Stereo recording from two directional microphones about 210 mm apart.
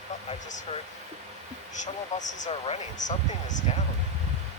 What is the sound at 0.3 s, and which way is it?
Speech, 35° left (ahead or behind).